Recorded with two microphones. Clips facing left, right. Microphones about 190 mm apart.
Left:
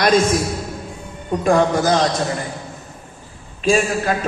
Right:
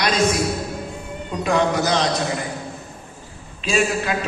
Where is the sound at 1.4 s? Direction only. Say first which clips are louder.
Left 4 dB; 50° left (ahead or behind).